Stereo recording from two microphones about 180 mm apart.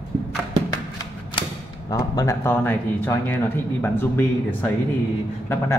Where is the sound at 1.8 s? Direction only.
20° left (ahead or behind).